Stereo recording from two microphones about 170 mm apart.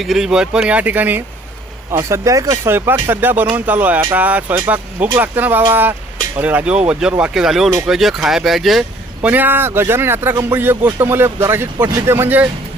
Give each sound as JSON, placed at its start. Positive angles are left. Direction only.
{"t": 0.0, "sound": "speech", "side_deg": 0}